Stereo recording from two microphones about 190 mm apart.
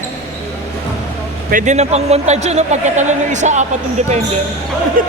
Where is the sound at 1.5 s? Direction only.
40° right (ahead or behind).